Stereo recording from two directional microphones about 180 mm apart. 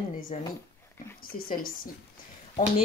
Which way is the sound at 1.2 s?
55° left (ahead or behind).